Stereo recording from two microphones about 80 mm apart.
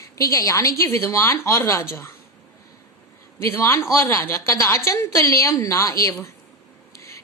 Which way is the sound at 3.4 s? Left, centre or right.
Left.